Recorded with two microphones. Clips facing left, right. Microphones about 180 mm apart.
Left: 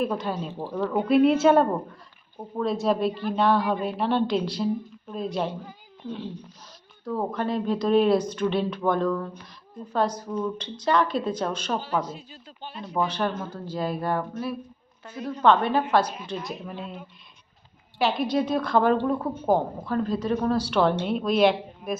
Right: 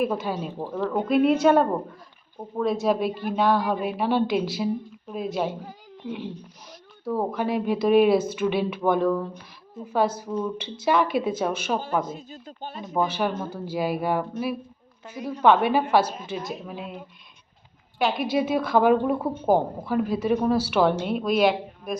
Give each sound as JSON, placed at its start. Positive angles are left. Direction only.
{"t": 0.0, "sound": "a woman's voice", "side_deg": -5}
{"t": 7.0, "sound": "a woman's voice", "side_deg": -10}
{"t": 11.8, "sound": "speech", "side_deg": -50}
{"t": 13.1, "sound": "a woman's voice", "side_deg": -10}
{"t": 18.0, "sound": "a woman's voice", "side_deg": -5}